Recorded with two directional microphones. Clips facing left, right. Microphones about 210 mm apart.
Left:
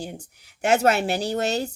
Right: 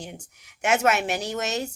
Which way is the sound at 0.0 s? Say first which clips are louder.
Left 4 dB; 35° left (ahead or behind).